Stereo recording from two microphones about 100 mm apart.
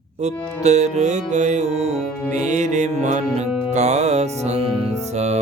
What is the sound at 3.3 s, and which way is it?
Music, 90° right.